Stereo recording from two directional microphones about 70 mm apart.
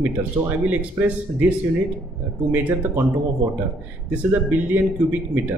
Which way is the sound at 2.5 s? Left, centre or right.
Right.